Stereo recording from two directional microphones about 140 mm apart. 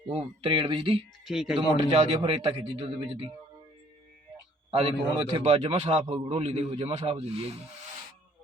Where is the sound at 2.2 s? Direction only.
45° right (ahead or behind).